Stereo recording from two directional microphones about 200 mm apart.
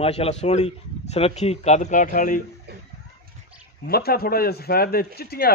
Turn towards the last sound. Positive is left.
turn(degrees=50)  # may be behind; listen again after turning